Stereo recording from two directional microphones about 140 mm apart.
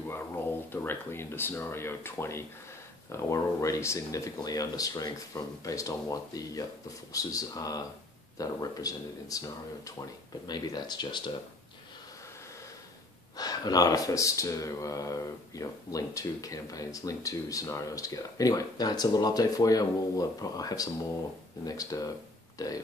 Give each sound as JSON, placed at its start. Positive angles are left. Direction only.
{"t": 0.1, "sound": "speech", "side_deg": 15}
{"t": 10.4, "sound": "speech", "side_deg": 30}
{"t": 13.4, "sound": "speech", "side_deg": 25}